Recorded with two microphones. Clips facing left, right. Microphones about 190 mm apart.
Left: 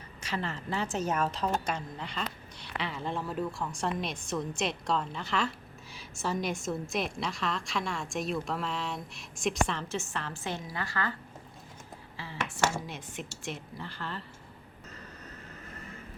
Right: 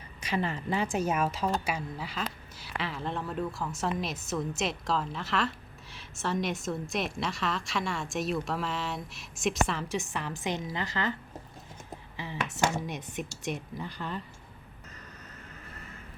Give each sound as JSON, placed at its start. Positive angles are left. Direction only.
{"t": 0.2, "sound": "a woman's voice", "side_deg": -15}
{"t": 12.1, "sound": "speech", "side_deg": -20}